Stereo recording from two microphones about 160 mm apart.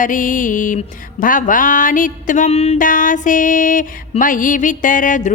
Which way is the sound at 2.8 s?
55° left (ahead or behind).